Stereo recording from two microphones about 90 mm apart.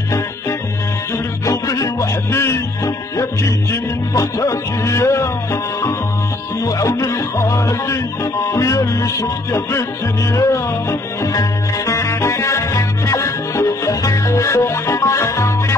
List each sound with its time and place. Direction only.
1.1 s music: 35° left (ahead or behind)